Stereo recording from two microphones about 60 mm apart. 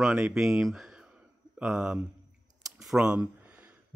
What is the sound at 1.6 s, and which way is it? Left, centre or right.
Speech, centre.